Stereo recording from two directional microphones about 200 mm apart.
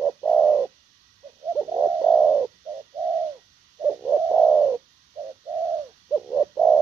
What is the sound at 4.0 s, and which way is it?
Bird, 5° right (ahead or behind).